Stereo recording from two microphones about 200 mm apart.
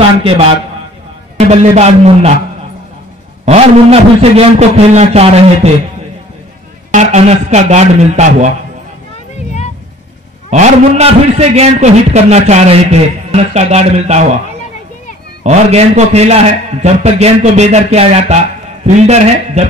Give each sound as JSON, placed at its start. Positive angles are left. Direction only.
{"t": 0.2, "sound": "a man's voice", "side_deg": -25}
{"t": 3.4, "sound": "a man's voice", "side_deg": -30}
{"t": 6.9, "sound": "a man's voice", "side_deg": -35}
{"t": 10.5, "sound": "a man's voice", "side_deg": -35}
{"t": 15.4, "sound": "a man's voice", "side_deg": -35}